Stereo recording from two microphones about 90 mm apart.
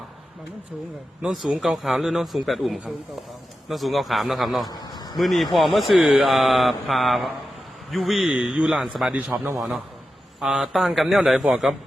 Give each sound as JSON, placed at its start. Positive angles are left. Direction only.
{"t": 1.3, "sound": "speech", "side_deg": 0}
{"t": 4.7, "sound": "a sound", "side_deg": 45}
{"t": 5.1, "sound": "speech", "side_deg": 0}
{"t": 9.1, "sound": "a man's voice", "side_deg": -20}
{"t": 9.6, "sound": "speech", "side_deg": -5}